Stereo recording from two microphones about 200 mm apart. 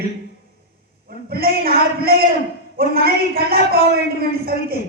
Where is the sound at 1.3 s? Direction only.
50° right (ahead or behind).